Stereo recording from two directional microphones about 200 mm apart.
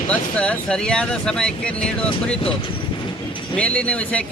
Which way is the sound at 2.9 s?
25° left (ahead or behind).